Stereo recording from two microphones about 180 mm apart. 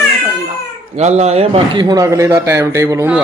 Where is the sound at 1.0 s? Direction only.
35° right (ahead or behind); by 3.2 s 15° right (ahead or behind).